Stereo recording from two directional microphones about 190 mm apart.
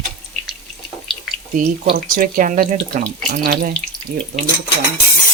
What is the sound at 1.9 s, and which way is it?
Speech, 50° right (ahead or behind).